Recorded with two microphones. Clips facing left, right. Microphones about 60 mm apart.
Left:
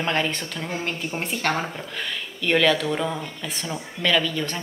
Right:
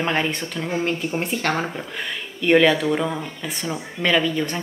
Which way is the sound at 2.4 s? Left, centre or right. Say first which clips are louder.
Right 4 dB; centre.